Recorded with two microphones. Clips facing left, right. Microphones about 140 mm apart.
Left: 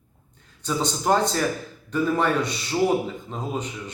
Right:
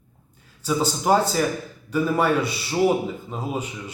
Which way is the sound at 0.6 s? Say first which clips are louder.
Right 3 dB; 5° right (ahead or behind).